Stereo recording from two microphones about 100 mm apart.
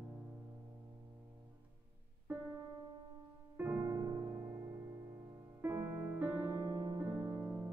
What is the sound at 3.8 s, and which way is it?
Music, 35° right (ahead or behind).